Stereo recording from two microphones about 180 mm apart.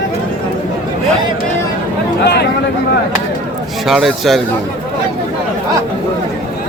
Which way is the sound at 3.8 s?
Centre (ahead or behind).